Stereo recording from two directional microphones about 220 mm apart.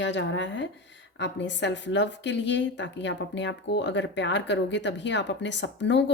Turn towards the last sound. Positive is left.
turn(degrees=55)  # may be behind; listen again after turning